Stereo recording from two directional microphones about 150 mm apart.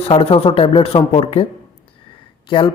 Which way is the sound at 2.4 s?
35° left (ahead or behind).